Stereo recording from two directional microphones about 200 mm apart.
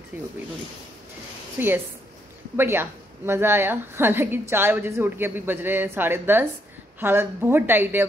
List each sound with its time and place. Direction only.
1.6 s a woman's voice: 10° right (ahead or behind)